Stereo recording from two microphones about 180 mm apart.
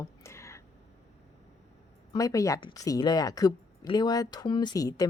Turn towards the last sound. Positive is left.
turn(degrees=20)  # may be behind; listen again after turning